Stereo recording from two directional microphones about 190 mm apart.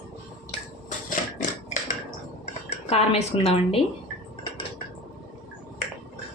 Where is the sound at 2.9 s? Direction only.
30° left (ahead or behind).